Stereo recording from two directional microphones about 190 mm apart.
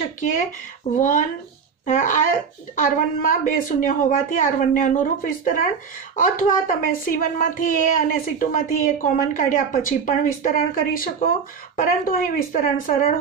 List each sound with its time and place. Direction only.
0.9 s speech: 45° left (ahead or behind)